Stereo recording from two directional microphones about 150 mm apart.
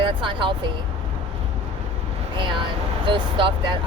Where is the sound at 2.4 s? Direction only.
35° right (ahead or behind).